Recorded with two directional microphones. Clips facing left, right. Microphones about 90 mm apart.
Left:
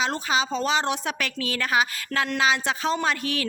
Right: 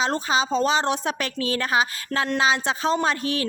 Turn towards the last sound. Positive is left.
turn(degrees=-30)  # may be behind; listen again after turning